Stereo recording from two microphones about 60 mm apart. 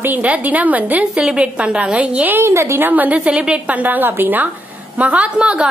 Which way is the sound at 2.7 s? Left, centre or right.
Right.